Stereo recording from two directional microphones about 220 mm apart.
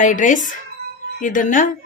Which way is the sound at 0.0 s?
35° left (ahead or behind).